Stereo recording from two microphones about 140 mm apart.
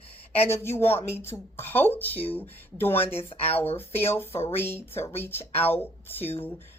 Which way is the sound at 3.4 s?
45° left (ahead or behind).